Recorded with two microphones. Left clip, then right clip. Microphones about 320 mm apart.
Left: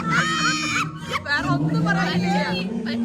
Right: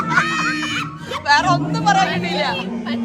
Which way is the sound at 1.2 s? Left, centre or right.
Centre.